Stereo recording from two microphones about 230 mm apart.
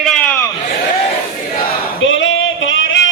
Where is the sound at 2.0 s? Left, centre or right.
Left.